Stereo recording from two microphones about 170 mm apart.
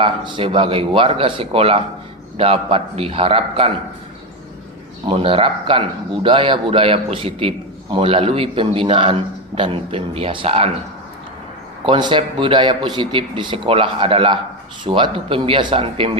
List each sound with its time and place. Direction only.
0.0 s a man's voice: 30° right (ahead or behind)
5.0 s a man's voice: 30° right (ahead or behind)
11.9 s a man's voice: 25° right (ahead or behind)